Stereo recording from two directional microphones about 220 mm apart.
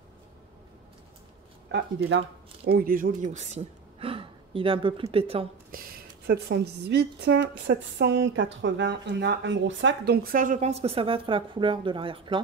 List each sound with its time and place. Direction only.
2.0 s speech: 55° right (ahead or behind); by 5.5 s 25° right (ahead or behind)
5.7 s a woman's voice: 45° right (ahead or behind); by 12.4 s 25° right (ahead or behind)